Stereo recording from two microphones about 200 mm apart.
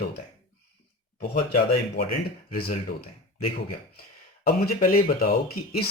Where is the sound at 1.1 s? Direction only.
50° left (ahead or behind).